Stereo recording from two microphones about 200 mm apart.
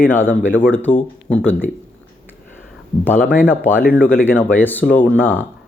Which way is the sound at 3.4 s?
5° right (ahead or behind).